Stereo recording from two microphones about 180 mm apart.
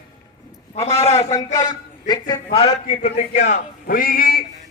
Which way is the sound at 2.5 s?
30° left (ahead or behind).